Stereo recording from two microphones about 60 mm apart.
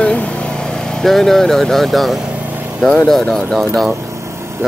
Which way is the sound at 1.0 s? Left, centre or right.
Centre.